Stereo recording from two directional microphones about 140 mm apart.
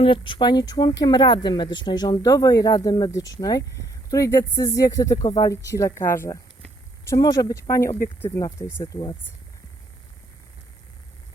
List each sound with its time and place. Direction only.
0.0 s speech: 35° left (ahead or behind)